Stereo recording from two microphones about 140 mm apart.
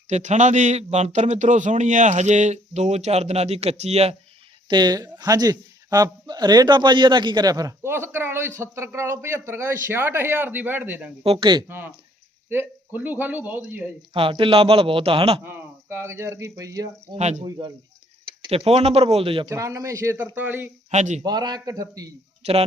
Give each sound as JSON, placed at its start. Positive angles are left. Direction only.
{"t": 0.1, "sound": "a man's voice", "side_deg": -60}
{"t": 4.7, "sound": "a man's voice", "side_deg": -30}
{"t": 11.2, "sound": "speech", "side_deg": -40}
{"t": 11.7, "sound": "a man's voice", "side_deg": -15}
{"t": 14.1, "sound": "speech", "side_deg": -40}
{"t": 15.4, "sound": "a man's voice", "side_deg": -15}
{"t": 18.4, "sound": "speech", "side_deg": -40}
{"t": 19.5, "sound": "a man's voice", "side_deg": -20}
{"t": 20.9, "sound": "a man's voice", "side_deg": -55}
{"t": 21.2, "sound": "a man's voice", "side_deg": -30}